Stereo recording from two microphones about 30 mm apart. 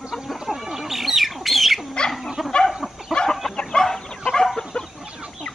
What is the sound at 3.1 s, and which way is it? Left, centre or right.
Chicken, left.